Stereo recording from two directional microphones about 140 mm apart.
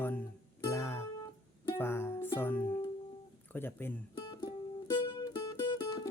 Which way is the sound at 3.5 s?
15° left (ahead or behind).